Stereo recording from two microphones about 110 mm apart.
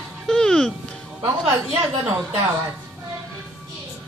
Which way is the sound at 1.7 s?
5° right (ahead or behind).